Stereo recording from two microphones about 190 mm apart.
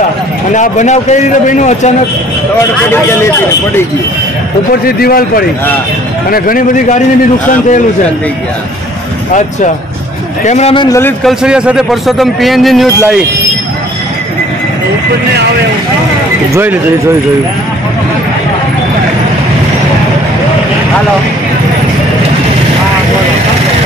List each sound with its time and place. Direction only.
0.5 s a man's voice: 40° left (ahead or behind)
2.9 s speech: 15° left (ahead or behind)
4.8 s a man's voice: 50° left (ahead or behind)
10.4 s a man's voice: 35° left (ahead or behind)
10.9 s speech: 10° left (ahead or behind)
11.2 s a man's voice: 5° right (ahead or behind)